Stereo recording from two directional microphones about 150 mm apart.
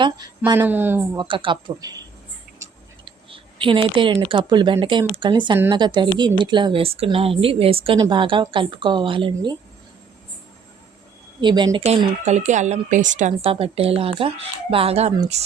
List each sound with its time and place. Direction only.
0.0 s speech: 25° right (ahead or behind)
1.1 s speech: 30° right (ahead or behind)
3.0 s a sound: 35° right (ahead or behind)
4.2 s a woman's voice: 35° right (ahead or behind)
7.9 s a woman's voice: 30° right (ahead or behind)
11.3 s speech: 30° right (ahead or behind)
12.2 s speech: 50° right (ahead or behind)